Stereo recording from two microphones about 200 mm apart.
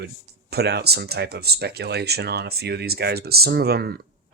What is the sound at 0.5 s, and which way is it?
Speech, 55° right (ahead or behind).